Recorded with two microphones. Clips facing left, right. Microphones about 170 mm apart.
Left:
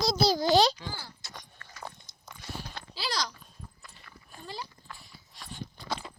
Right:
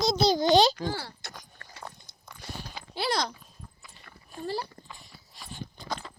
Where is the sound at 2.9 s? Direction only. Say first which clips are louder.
Right 5 dB; 55° right (ahead or behind).